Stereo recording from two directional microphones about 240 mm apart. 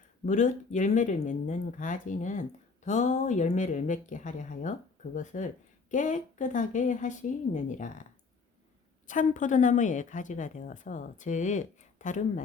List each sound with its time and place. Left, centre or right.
0.3 s speech: left
9.0 s speech: left